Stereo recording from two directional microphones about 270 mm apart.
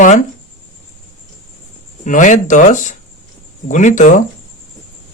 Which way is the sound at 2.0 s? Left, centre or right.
Left.